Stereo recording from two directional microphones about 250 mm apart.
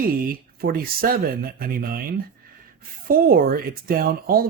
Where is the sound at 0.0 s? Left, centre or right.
Right.